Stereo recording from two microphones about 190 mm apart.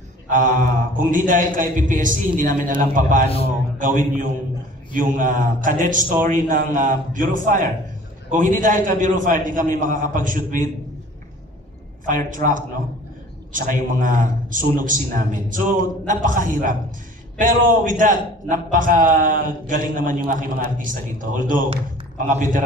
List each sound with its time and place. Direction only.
0.3 s a man's voice: 45° right (ahead or behind)
12.1 s a man's voice: 45° right (ahead or behind)